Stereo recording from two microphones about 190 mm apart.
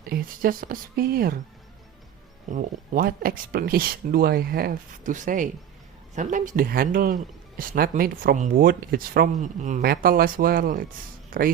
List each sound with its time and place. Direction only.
0.1 s speech: 50° right (ahead or behind)
2.5 s speech: 45° right (ahead or behind)